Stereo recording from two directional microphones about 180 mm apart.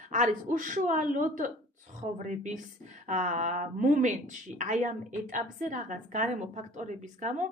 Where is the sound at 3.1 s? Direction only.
45° right (ahead or behind).